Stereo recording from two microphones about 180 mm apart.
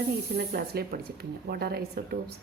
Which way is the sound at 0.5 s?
60° right (ahead or behind).